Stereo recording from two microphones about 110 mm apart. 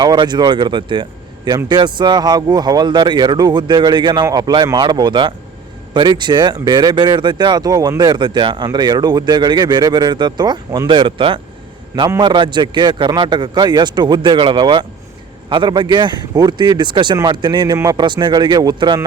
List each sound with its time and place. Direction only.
0.0 s speech: 40° right (ahead or behind)
10.9 s speech: 50° right (ahead or behind)